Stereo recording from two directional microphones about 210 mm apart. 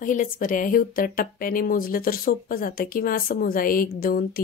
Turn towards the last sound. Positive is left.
turn(degrees=45)  # may be behind; listen again after turning